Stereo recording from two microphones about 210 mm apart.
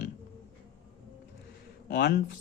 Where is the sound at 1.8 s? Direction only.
50° left (ahead or behind).